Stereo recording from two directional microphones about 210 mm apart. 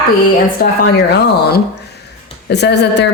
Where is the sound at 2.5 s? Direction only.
55° left (ahead or behind).